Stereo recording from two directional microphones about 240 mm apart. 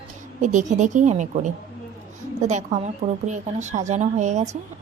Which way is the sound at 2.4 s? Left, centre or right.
Right.